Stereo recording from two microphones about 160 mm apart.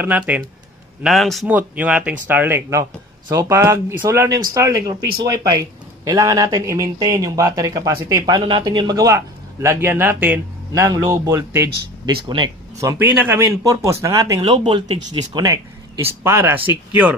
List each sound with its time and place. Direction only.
0.0 s speech: 10° right (ahead or behind)
1.0 s speech: centre (ahead or behind); by 11.7 s 20° right (ahead or behind)
12.3 s speech: 30° right (ahead or behind)
13.1 s speech: 10° right (ahead or behind)
13.4 s speech: 20° right (ahead or behind)